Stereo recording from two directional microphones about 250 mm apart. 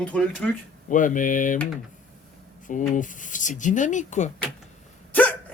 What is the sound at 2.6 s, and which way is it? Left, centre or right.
Speech, left.